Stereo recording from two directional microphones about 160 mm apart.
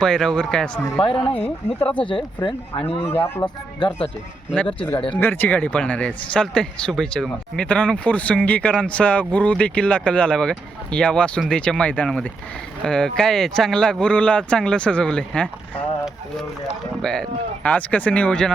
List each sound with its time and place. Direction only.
0.0 s speech: 5° left (ahead or behind)
0.9 s speech: 35° left (ahead or behind)
1.5 s speech: 10° left (ahead or behind)
2.0 s speech: 30° left (ahead or behind)
2.9 s speech: 10° left (ahead or behind)
3.4 s speech: 30° left (ahead or behind)
5.1 s speech: 10° left (ahead or behind)
17.0 s speech: 5° left (ahead or behind)